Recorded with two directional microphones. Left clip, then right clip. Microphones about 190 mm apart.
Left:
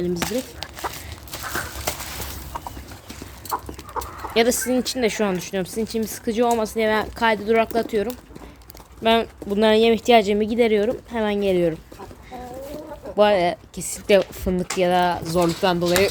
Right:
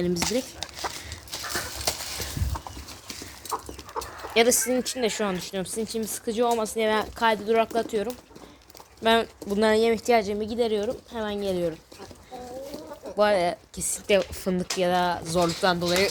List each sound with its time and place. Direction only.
0.0 s speech: 10° right (ahead or behind)
0.3 s walk: 5° right (ahead or behind)
1.9 s a sound: 10° left (ahead or behind)
4.0 s chicken: 20° right (ahead or behind)
4.4 s speech: 5° left (ahead or behind)
10.1 s a woman's voice: 30° left (ahead or behind)
13.1 s speech: 15° left (ahead or behind)